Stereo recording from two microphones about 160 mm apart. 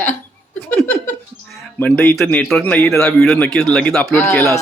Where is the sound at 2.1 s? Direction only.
5° left (ahead or behind).